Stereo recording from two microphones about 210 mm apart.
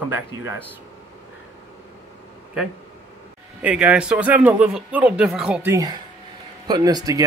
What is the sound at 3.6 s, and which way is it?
Speech, 5° right (ahead or behind).